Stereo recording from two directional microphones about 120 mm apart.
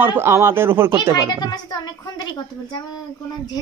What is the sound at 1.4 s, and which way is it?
A woman's voice, 35° left (ahead or behind).